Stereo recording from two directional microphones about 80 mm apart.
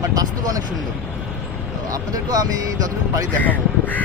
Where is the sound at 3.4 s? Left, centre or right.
Left.